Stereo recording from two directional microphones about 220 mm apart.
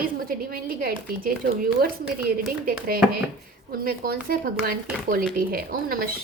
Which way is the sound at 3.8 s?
40° right (ahead or behind).